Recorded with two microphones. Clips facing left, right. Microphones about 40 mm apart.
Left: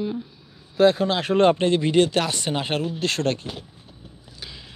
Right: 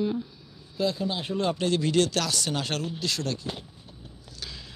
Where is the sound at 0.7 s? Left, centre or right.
Left.